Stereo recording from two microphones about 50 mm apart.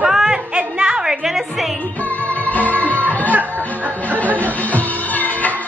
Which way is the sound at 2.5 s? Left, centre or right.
Left.